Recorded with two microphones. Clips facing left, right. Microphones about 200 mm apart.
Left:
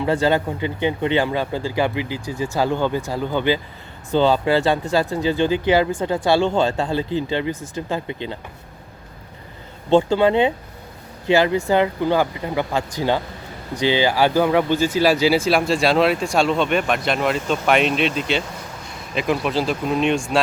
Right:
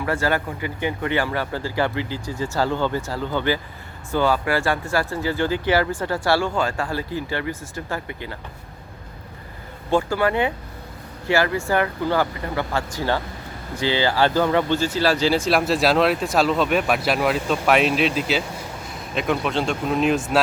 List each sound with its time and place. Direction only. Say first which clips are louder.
0.0 s speech: left 4 dB; 20° left (ahead or behind)
9.9 s speech: left 5 dB; 20° left (ahead or behind); by 20.4 s 5° right (ahead or behind)